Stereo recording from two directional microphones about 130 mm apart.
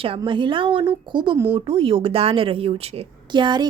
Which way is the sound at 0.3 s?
40° right (ahead or behind).